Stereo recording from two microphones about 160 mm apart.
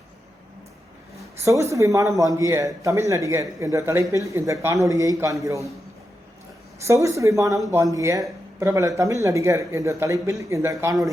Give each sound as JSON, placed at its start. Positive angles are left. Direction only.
{"t": 1.5, "sound": "speech", "side_deg": -20}
{"t": 6.8, "sound": "speech", "side_deg": -20}